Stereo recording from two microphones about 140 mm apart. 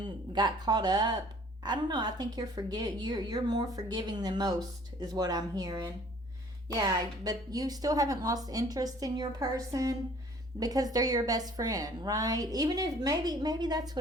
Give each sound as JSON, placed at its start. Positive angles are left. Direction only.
{"t": 0.3, "sound": "a woman's voice", "side_deg": -30}